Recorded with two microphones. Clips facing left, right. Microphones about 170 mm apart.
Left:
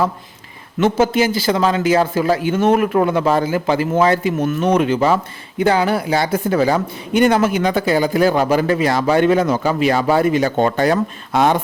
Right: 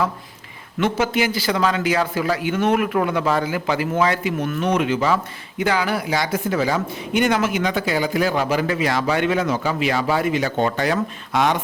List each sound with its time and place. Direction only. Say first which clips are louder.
0.8 s speech: left 5 dB; 30° left (ahead or behind)